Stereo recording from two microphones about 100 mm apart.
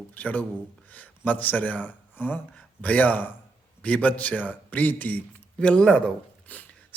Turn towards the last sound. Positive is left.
turn(degrees=15)  # may be behind; listen again after turning